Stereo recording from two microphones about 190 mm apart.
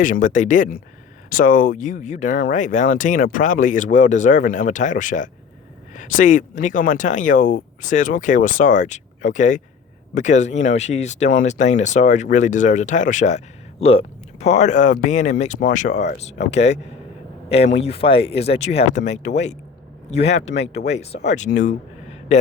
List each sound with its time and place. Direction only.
0.0 s a man's voice: 45° left (ahead or behind)